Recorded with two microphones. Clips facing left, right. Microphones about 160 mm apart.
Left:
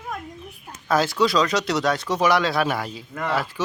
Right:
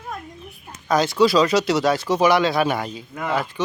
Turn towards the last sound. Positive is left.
turn(degrees=0)  # may be behind; listen again after turning